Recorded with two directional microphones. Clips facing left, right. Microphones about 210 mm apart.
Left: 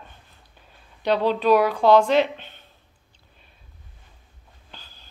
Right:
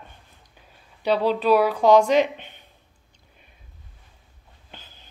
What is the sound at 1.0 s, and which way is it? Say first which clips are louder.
Speech: even; 5° right (ahead or behind).